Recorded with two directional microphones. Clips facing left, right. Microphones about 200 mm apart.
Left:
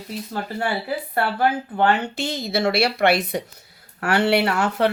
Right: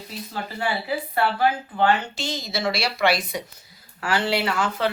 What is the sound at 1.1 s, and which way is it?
Speech, 50° left (ahead or behind).